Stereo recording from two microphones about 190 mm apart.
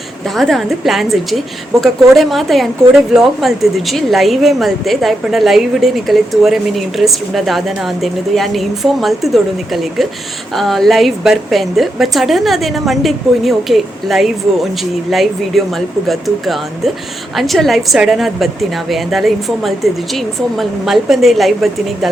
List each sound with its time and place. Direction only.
0.3 s a woman's voice: centre (ahead or behind)